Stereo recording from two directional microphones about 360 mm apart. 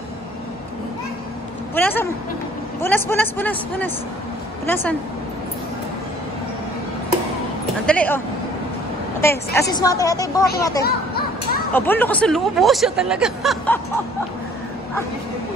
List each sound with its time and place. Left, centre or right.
1.8 s speech: centre
7.8 s speech: centre
9.2 s a woman's voice: centre
10.8 s a sound: left
11.7 s speech: centre